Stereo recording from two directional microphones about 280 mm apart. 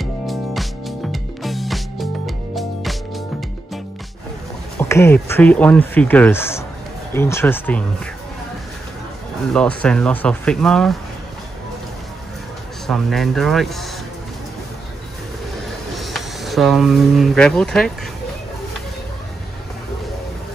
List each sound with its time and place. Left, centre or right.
0.0 s music: centre
4.7 s speech: centre
9.5 s speech: centre
12.8 s speech: centre
15.9 s speech: centre